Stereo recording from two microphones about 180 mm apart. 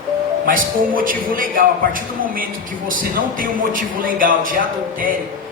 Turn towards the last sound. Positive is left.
turn(degrees=-50)  # may be behind; listen again after turning